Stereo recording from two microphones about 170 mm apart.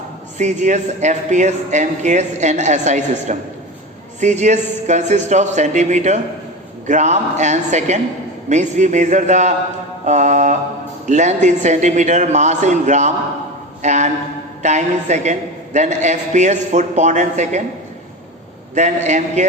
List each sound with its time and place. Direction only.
0.3 s a man's voice: 45° right (ahead or behind)
18.7 s a man's voice: 45° right (ahead or behind)